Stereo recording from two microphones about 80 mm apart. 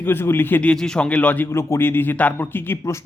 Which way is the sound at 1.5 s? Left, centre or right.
Left.